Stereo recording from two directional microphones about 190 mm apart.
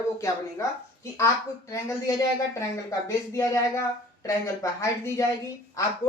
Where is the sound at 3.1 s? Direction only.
15° left (ahead or behind).